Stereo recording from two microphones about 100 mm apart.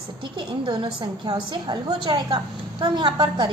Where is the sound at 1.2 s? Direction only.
40° right (ahead or behind).